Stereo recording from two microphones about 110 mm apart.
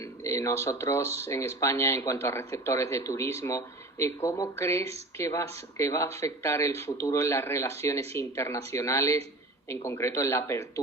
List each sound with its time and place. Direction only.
0.0 s speech: 25° left (ahead or behind)